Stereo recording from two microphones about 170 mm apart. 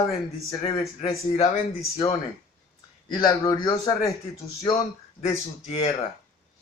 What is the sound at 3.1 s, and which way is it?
Speech, 25° left (ahead or behind).